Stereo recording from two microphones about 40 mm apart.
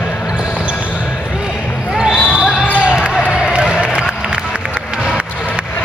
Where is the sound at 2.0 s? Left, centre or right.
Centre.